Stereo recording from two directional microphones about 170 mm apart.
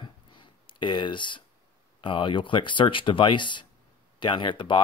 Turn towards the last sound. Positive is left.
turn(degrees=30)  # may be behind; listen again after turning